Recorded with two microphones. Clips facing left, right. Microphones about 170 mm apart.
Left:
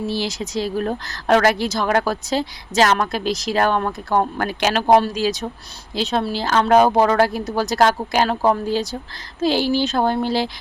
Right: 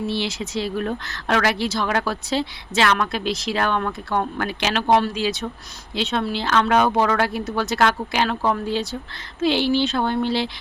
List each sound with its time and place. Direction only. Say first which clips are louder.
0.1 s a woman's voice: left 1 dB; 40° left (ahead or behind)